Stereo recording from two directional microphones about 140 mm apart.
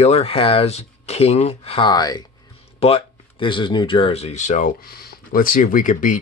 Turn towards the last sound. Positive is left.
turn(degrees=70)  # may be behind; listen again after turning